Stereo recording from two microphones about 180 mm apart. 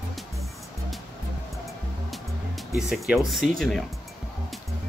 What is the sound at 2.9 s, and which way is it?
Speech, centre (ahead or behind).